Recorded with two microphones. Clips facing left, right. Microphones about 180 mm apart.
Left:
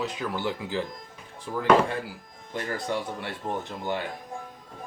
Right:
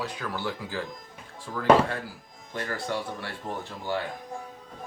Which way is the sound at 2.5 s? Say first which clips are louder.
Left 1 dB; 20° left (ahead or behind).